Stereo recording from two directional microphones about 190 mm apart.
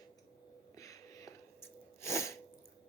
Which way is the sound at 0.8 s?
15° left (ahead or behind).